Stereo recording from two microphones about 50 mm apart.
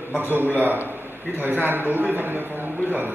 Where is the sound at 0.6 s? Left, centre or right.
Right.